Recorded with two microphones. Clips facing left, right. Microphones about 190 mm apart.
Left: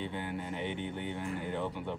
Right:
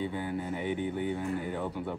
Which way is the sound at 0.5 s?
10° right (ahead or behind).